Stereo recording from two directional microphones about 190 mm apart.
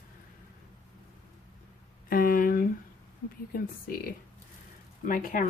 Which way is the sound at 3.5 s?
50° left (ahead or behind).